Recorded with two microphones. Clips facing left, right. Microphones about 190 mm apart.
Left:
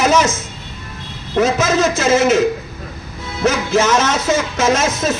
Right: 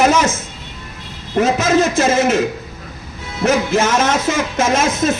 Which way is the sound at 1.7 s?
55° right (ahead or behind).